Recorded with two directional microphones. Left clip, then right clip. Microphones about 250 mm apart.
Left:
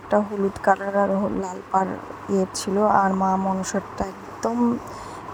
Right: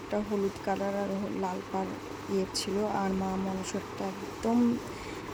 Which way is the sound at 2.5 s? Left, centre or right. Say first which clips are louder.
Left 12 dB; centre.